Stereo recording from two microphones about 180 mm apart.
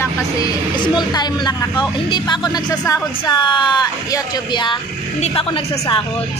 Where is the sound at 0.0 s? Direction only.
20° left (ahead or behind).